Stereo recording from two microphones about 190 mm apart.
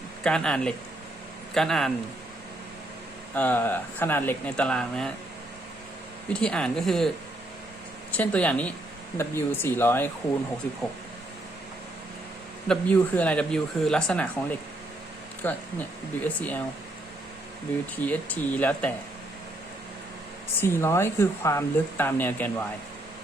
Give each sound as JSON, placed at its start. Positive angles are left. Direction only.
{"t": 0.2, "sound": "speech", "side_deg": 5}
{"t": 3.3, "sound": "speech", "side_deg": 10}
{"t": 6.2, "sound": "speech", "side_deg": 5}
{"t": 8.1, "sound": "speech", "side_deg": 5}
{"t": 12.6, "sound": "speech", "side_deg": 5}
{"t": 15.4, "sound": "speech", "side_deg": 10}
{"t": 18.0, "sound": "speech", "side_deg": 10}
{"t": 20.6, "sound": "speech", "side_deg": 15}